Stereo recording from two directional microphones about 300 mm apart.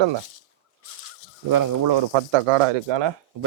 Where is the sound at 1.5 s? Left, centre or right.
Right.